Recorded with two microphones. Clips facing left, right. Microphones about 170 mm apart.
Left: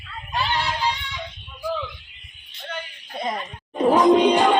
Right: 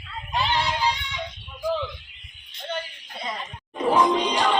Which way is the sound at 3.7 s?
40° left (ahead or behind).